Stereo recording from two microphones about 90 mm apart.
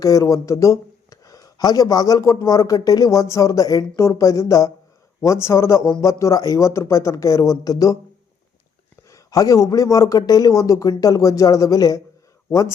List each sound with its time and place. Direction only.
0.0 s a man's voice: 40° left (ahead or behind)
9.0 s a man's voice: 35° left (ahead or behind)